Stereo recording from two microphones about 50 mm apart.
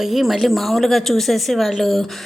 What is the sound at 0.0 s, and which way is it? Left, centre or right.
A woman's voice, centre.